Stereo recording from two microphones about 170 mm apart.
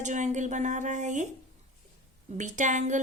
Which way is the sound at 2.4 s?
45° right (ahead or behind).